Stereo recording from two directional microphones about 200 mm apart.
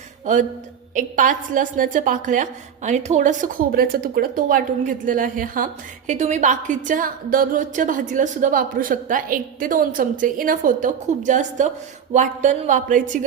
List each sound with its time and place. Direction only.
0.9 s a woman's voice: 40° right (ahead or behind)